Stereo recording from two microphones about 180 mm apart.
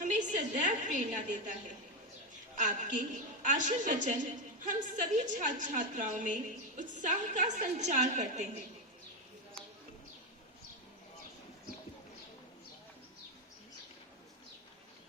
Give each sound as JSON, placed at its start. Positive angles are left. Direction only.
{"t": 0.0, "sound": "a woman's voice", "side_deg": -45}
{"t": 2.6, "sound": "a woman's voice", "side_deg": -45}